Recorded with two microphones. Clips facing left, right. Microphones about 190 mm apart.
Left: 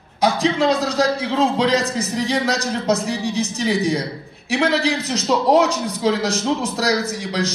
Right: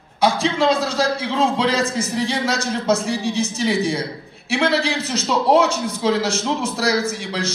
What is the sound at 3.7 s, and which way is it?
Speech, 35° left (ahead or behind).